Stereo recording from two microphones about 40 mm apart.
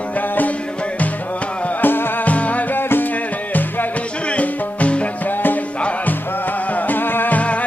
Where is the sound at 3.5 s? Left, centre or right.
Left.